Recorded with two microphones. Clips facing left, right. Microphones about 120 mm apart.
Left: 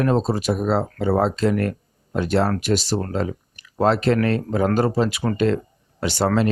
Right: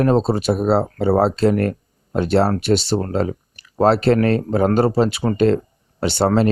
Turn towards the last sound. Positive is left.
turn(degrees=-30)  # may be behind; listen again after turning